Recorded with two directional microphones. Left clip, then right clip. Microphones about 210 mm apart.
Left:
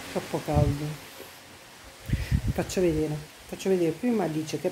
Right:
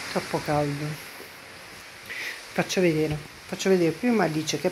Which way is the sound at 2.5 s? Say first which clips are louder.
Right 3 dB; 5° left (ahead or behind).